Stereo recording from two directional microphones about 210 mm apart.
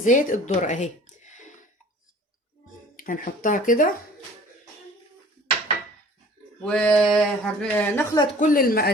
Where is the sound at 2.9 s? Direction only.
40° left (ahead or behind).